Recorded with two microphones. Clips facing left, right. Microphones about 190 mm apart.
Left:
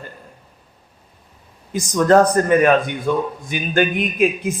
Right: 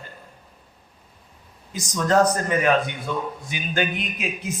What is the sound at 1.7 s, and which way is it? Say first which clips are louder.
A man's voice: left 7 dB; 55° left (ahead or behind).